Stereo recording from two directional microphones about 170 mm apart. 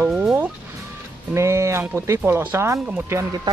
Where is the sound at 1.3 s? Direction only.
15° right (ahead or behind).